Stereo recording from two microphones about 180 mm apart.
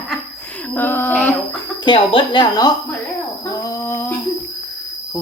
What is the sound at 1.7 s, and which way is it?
Speech, 25° left (ahead or behind).